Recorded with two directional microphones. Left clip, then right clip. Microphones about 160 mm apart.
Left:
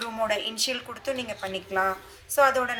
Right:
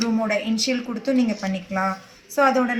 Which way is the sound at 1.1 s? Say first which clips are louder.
Right 8 dB; 5° left (ahead or behind).